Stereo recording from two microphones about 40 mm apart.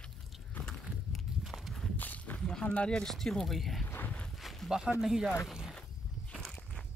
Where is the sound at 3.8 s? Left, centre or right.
Left.